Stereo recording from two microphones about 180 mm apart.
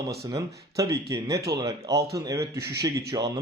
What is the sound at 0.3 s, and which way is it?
Speech, 20° right (ahead or behind).